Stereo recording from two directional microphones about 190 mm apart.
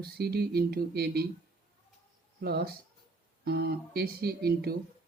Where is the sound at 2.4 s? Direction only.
55° right (ahead or behind).